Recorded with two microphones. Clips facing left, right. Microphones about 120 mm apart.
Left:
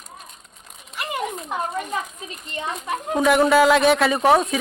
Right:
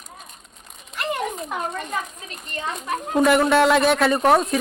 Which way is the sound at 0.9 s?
5° left (ahead or behind).